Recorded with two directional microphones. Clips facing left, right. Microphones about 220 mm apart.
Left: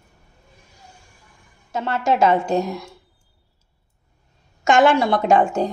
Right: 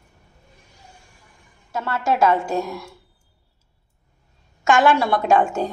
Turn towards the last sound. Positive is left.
turn(degrees=20)  # may be behind; listen again after turning